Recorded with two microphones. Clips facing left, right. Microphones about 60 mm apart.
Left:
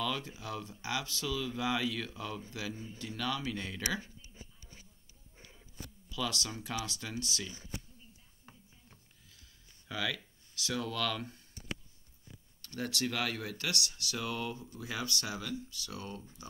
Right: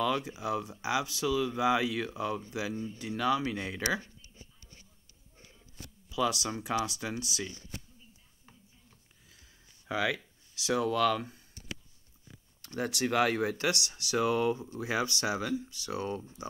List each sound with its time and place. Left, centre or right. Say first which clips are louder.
0.0 s speech: right 6 dB; centre
2.7 s speech: right 7 dB; centre
3.0 s speech: right 7 dB; centre
6.0 s speech: right 7 dB; centre
9.8 s speech: right 6 dB; centre
12.6 s speech: right 4 dB; centre